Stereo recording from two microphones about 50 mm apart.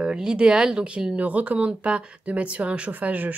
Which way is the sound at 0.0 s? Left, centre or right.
Centre.